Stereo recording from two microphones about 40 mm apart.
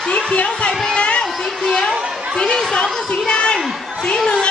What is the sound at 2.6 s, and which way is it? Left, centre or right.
A woman's voice, centre.